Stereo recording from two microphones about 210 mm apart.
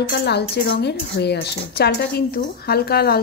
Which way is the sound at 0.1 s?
50° left (ahead or behind).